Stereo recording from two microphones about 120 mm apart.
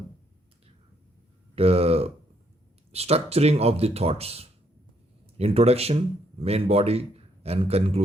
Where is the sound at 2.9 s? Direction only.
60° right (ahead or behind).